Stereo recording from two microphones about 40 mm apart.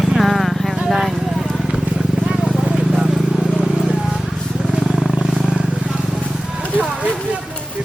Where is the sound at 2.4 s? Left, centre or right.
Centre.